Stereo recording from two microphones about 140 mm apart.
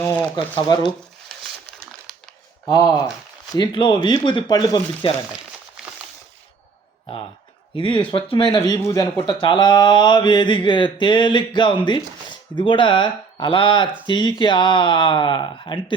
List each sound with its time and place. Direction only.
0.0 s a sound: 15° left (ahead or behind)
0.3 s speech: 35° left (ahead or behind)
2.6 s speech: 30° left (ahead or behind)
7.8 s speech: 35° left (ahead or behind)
9.1 s speech: 35° left (ahead or behind)